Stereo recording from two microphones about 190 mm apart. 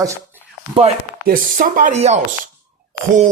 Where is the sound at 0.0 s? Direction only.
15° right (ahead or behind).